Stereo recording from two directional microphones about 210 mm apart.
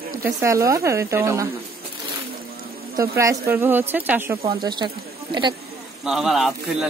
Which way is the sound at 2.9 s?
15° right (ahead or behind).